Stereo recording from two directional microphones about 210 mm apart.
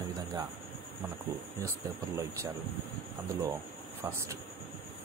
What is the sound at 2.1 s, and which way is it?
Speech, 15° right (ahead or behind).